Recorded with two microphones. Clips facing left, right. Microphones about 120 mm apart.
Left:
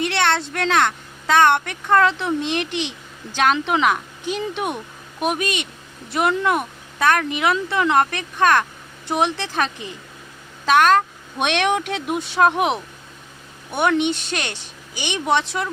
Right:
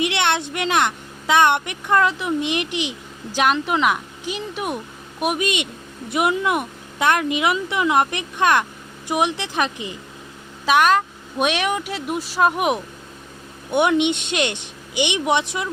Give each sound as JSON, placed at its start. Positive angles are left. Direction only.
{"t": 0.0, "sound": "a woman's voice", "side_deg": -20}
{"t": 13.7, "sound": "speech", "side_deg": -20}